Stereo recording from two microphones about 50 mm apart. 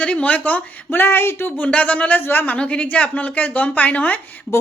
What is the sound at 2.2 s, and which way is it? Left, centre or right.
Speech, left.